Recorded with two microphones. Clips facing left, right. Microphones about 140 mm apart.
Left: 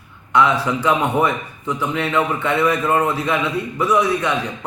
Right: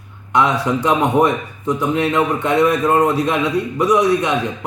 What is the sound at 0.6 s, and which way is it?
A man's voice, 15° right (ahead or behind).